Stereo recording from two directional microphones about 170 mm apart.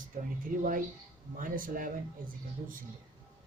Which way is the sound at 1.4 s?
55° right (ahead or behind).